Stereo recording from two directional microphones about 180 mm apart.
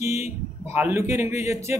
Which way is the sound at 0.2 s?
10° right (ahead or behind).